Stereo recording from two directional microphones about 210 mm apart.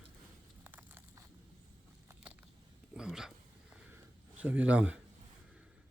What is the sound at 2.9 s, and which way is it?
Speech, 5° right (ahead or behind).